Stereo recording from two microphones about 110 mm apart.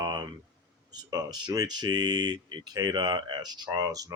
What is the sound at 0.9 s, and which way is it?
Speech, 35° right (ahead or behind).